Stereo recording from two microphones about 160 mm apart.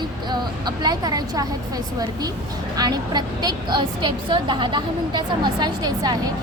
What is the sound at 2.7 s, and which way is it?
A woman's voice, 25° right (ahead or behind).